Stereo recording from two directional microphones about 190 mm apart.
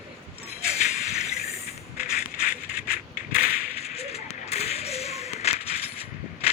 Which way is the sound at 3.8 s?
35° left (ahead or behind).